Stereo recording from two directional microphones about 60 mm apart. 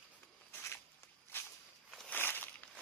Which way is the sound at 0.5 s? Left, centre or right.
Left.